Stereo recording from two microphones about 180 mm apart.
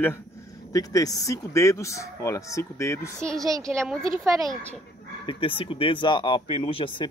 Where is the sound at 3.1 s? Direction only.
Centre (ahead or behind).